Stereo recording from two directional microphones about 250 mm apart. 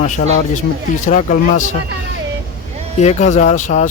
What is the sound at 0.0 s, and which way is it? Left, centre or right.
Speech, left.